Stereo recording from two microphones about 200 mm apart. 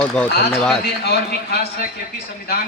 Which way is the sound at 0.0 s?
5° left (ahead or behind).